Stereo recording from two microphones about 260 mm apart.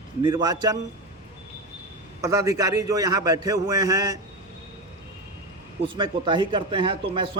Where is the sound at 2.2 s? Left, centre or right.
Centre.